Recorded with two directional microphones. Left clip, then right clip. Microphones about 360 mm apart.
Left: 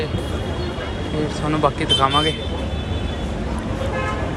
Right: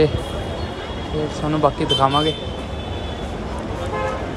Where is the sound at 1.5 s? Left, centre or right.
Centre.